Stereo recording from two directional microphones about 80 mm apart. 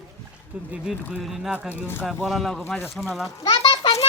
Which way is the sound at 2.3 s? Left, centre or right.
Centre.